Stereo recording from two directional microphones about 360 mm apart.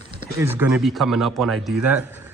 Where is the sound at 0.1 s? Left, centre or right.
Centre.